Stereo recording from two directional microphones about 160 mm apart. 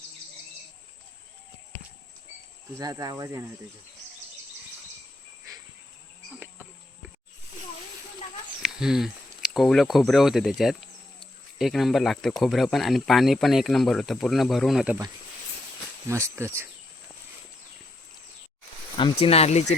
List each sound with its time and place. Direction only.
2.7 s speech: 25° right (ahead or behind)
8.6 s speech: 5° right (ahead or behind)
16.0 s speech: 15° right (ahead or behind)
18.9 s speech: 35° left (ahead or behind)